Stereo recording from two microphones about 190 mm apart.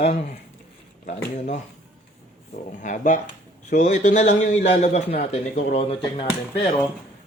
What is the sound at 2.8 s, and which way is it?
A man's voice, 40° left (ahead or behind).